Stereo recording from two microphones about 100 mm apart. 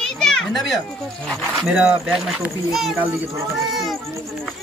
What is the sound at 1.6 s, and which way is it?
Speech, 15° right (ahead or behind).